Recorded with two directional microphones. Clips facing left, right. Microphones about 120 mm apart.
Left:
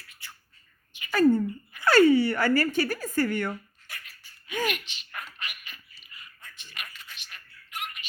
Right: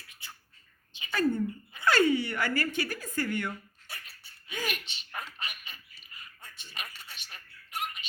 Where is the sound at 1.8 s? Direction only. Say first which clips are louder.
Left 6 dB; 45° left (ahead or behind).